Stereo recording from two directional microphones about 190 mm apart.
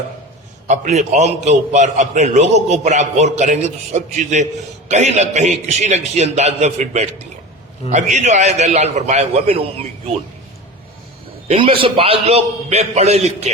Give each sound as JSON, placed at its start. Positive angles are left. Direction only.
{"t": 0.7, "sound": "a man's voice", "side_deg": -40}
{"t": 8.1, "sound": "a man's voice", "side_deg": -40}
{"t": 11.4, "sound": "a man's voice", "side_deg": -30}